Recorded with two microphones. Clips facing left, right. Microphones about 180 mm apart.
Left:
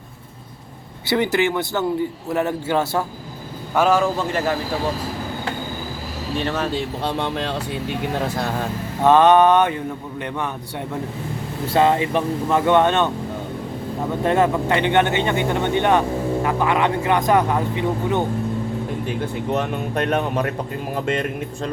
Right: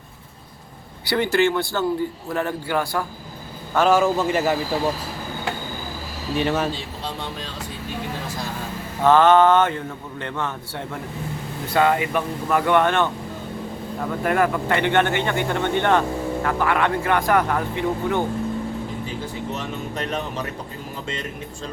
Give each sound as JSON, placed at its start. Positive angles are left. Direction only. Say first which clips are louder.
{"t": 1.0, "sound": "speech", "louder": "even", "side_deg": 20}
{"t": 3.8, "sound": "a man's voice", "louder": "even", "side_deg": 0}
{"t": 6.4, "sound": "speech", "louder": "right 2 dB", "side_deg": -5}
{"t": 7.0, "sound": "speech", "louder": "left 7 dB", "side_deg": 65}
{"t": 9.0, "sound": "speech", "louder": "left 1 dB", "side_deg": 20}
{"t": 11.6, "sound": "speech", "louder": "left 2 dB", "side_deg": 30}
{"t": 14.3, "sound": "speech", "louder": "left 2 dB", "side_deg": 25}
{"t": 19.0, "sound": "speech", "louder": "left 5 dB", "side_deg": 60}